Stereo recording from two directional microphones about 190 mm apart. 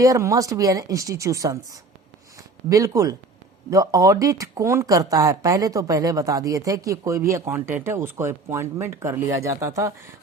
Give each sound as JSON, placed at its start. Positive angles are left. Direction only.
{"t": 0.0, "sound": "speech", "side_deg": -15}